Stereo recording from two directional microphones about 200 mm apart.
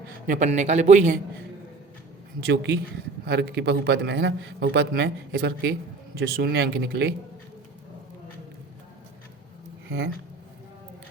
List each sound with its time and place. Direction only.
0.3 s a man's voice: 35° right (ahead or behind)
2.4 s a man's voice: 60° right (ahead or behind)